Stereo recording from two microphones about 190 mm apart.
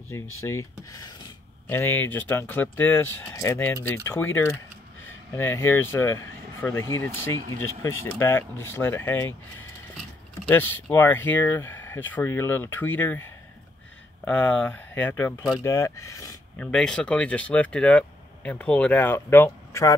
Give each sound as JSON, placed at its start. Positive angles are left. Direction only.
{"t": 0.4, "sound": "speech", "side_deg": 15}
{"t": 14.2, "sound": "speech", "side_deg": 10}
{"t": 16.7, "sound": "speech", "side_deg": 5}